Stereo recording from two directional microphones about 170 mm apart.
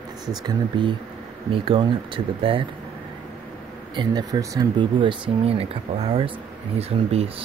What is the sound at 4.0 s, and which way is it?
Speech, 25° right (ahead or behind).